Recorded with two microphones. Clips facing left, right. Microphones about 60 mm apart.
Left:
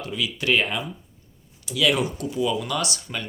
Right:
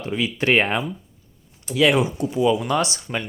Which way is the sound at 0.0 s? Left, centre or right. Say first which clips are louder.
Right 4 dB; right.